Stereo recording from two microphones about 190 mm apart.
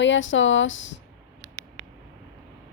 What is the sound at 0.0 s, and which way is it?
Speech, 80° left.